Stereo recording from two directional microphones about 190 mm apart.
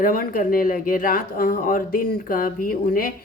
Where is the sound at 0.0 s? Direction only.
50° left (ahead or behind).